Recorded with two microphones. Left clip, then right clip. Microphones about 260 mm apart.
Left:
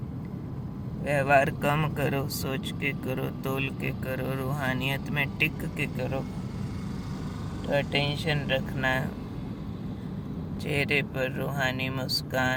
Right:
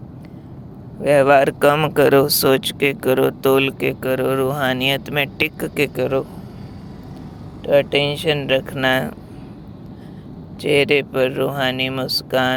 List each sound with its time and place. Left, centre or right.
1.0 s speech: right
7.7 s speech: right
10.6 s speech: right